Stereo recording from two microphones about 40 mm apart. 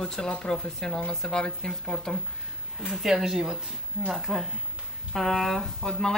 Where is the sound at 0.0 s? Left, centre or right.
Centre.